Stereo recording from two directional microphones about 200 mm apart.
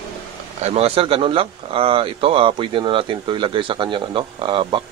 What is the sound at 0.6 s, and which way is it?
Speech, 30° right (ahead or behind).